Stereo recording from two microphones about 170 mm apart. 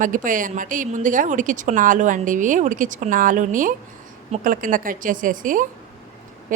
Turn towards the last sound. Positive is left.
turn(degrees=-50)  # may be behind; listen again after turning